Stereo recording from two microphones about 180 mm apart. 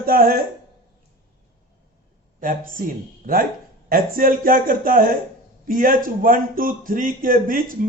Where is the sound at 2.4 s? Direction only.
50° right (ahead or behind).